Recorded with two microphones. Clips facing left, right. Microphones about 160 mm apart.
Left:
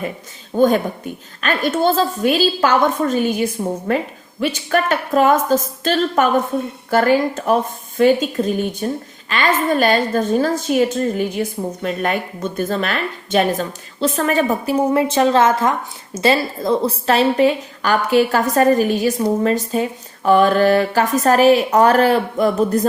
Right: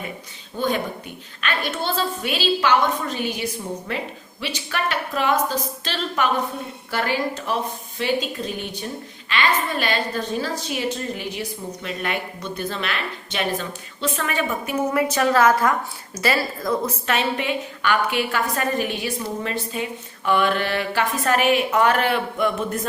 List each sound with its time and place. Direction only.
0.5 s a woman's voice: 45° left (ahead or behind)